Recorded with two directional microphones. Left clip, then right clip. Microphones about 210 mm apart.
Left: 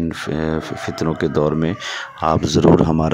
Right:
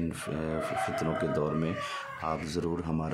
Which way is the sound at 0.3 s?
35° left (ahead or behind).